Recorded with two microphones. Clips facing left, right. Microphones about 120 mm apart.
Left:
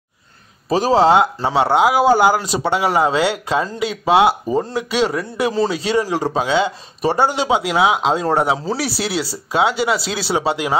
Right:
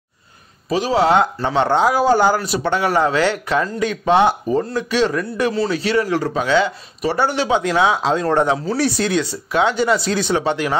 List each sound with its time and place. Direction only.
0.7 s speech: 35° left (ahead or behind)
1.1 s speech: 10° left (ahead or behind)